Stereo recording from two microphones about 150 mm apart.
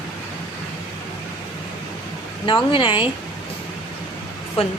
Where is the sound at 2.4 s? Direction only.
35° left (ahead or behind).